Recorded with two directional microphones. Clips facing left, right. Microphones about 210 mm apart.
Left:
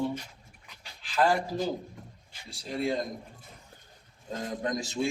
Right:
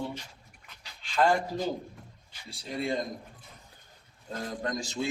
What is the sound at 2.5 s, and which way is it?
Speech, centre (ahead or behind).